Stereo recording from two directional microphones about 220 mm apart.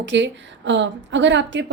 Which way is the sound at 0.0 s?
55° right (ahead or behind).